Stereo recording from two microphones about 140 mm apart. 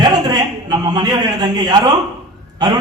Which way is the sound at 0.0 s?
30° right (ahead or behind).